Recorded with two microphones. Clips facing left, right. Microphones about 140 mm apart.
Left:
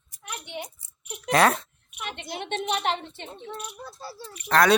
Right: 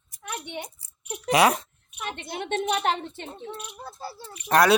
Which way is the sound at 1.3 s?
10° right (ahead or behind).